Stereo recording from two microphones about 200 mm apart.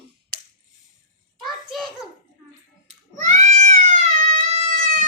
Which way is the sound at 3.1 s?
40° right (ahead or behind).